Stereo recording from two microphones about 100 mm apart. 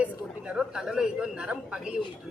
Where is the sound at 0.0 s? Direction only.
10° right (ahead or behind).